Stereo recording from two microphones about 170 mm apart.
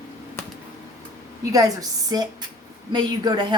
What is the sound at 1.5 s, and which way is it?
A woman's voice, 20° right (ahead or behind).